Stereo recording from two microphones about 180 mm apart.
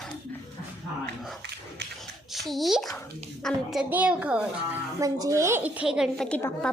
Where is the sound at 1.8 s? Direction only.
70° right (ahead or behind).